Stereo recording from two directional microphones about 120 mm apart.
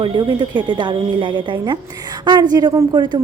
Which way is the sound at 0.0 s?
40° right (ahead or behind).